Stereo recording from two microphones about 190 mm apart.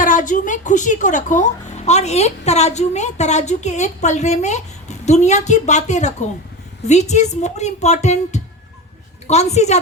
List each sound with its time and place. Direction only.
0.0 s speech: 45° left (ahead or behind)